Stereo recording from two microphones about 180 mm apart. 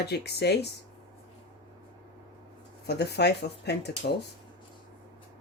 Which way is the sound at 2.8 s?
65° left (ahead or behind).